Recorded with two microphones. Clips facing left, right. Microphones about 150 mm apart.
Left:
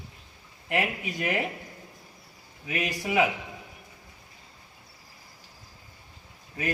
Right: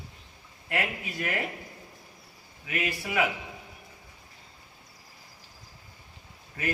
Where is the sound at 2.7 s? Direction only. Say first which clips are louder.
Left 3 dB; 20° left (ahead or behind).